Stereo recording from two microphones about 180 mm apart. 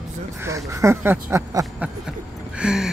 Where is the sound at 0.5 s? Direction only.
15° right (ahead or behind).